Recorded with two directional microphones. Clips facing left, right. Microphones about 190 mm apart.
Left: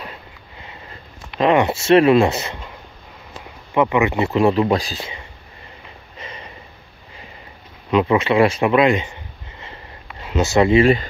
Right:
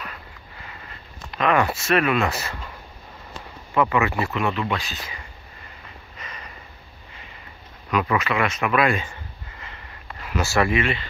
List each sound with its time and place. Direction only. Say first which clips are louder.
0.0 s vehicle: left 3 dB; 25° left (ahead or behind)
1.4 s speech: left 5 dB; 25° left (ahead or behind)
3.7 s speech: left 4 dB; 20° left (ahead or behind)
6.1 s snort: left 5 dB; 25° left (ahead or behind)
7.9 s speech: left 7 dB; 25° left (ahead or behind)
10.8 s speech: left 11 dB; 40° left (ahead or behind)